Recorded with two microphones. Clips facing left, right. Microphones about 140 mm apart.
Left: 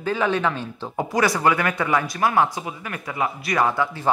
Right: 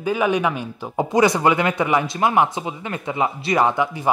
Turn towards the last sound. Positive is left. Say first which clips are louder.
# right 2 dB
turn(degrees=-15)  # may be behind; listen again after turning